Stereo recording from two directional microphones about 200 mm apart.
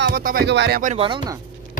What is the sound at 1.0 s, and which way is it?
Speech, 25° right (ahead or behind).